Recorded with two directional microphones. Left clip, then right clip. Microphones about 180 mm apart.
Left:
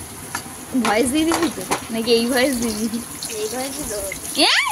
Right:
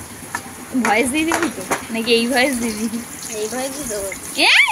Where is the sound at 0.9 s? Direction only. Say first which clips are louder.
Right 1 dB; 15° left (ahead or behind).